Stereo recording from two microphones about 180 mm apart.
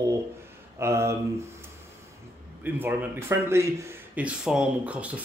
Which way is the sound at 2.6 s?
10° right (ahead or behind).